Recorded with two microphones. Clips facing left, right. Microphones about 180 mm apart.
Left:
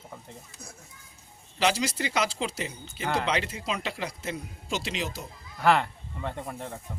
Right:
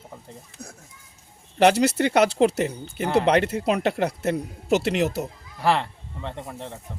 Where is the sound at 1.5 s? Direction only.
60° right (ahead or behind).